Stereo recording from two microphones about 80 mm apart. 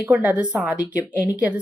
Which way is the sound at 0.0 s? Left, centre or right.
Centre.